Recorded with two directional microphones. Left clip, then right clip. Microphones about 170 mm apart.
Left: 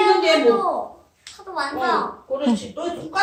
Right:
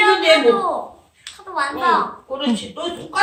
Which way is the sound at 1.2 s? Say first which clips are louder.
Right 4 dB; 10° left (ahead or behind).